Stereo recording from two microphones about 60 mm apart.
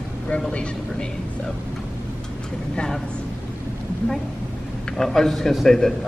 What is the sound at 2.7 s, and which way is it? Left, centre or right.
Speech, centre.